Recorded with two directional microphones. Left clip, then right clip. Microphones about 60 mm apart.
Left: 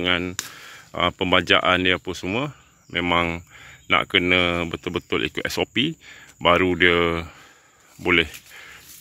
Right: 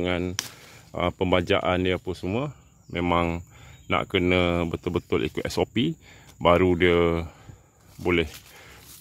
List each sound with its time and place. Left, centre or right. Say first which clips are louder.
0.0 s speech: left 4 dB; centre
2.9 s speech: left 3 dB; centre
4.2 s speech: left 3 dB; right
8.0 s speech: left 5 dB; centre